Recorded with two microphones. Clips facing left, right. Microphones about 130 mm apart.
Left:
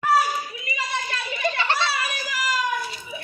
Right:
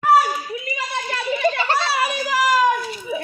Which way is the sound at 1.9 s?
80° right.